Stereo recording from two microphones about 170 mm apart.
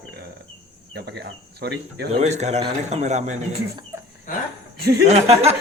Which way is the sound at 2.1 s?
40° right (ahead or behind).